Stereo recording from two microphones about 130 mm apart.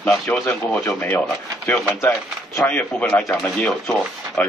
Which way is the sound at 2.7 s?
10° left (ahead or behind).